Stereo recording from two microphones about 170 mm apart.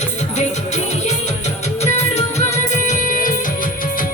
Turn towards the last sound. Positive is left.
turn(degrees=50)  # may be behind; listen again after turning